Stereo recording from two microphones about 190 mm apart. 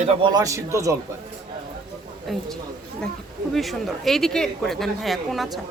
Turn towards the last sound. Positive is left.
turn(degrees=0)  # may be behind; listen again after turning